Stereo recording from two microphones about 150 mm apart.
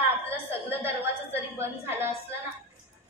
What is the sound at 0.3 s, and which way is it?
A woman's voice, 15° right (ahead or behind).